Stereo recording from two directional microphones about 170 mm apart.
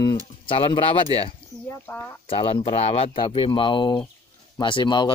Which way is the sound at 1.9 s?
15° left (ahead or behind).